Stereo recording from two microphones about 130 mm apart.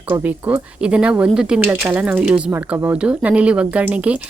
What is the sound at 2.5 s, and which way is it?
Speech, 20° right (ahead or behind).